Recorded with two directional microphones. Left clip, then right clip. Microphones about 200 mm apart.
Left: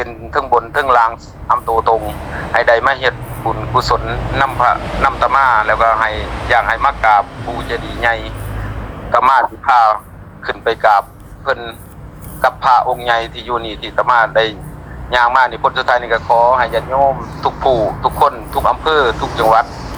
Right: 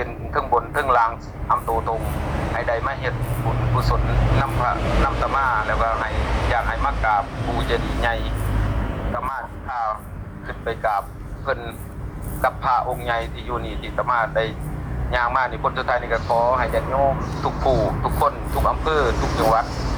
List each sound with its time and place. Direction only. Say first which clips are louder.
0.0 s speech: left 6 dB; 35° left (ahead or behind)
8.0 s speech: left 11 dB; 15° left (ahead or behind)
9.1 s a man's voice: left 19 dB; 40° left (ahead or behind)
11.4 s a man's voice: left 7 dB; 15° left (ahead or behind)